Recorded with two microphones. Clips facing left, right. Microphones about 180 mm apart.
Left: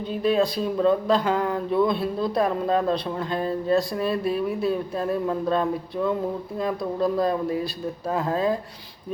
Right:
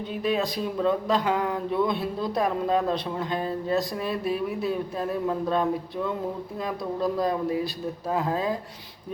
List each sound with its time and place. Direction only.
0.2 s speech: 15° right (ahead or behind)
6.6 s speech: 15° right (ahead or behind)